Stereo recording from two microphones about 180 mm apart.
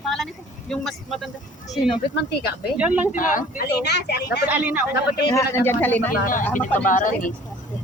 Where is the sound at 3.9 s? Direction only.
65° left (ahead or behind).